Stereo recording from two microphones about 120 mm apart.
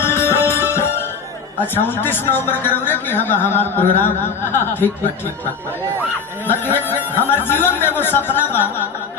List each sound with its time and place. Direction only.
0.0 s music: 20° left (ahead or behind)
1.7 s a man's voice: 15° left (ahead or behind)
6.5 s a man's voice: 20° left (ahead or behind)